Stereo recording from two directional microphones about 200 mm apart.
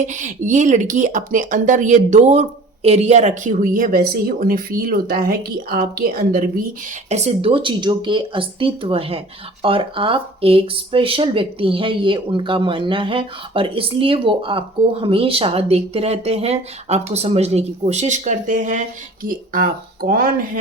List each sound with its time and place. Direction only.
0.0 s speech: 40° right (ahead or behind)
7.1 s speech: 30° right (ahead or behind)